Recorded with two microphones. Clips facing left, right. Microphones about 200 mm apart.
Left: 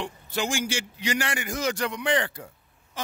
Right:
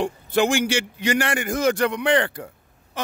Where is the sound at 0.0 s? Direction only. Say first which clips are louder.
Right 9 dB; 55° right (ahead or behind).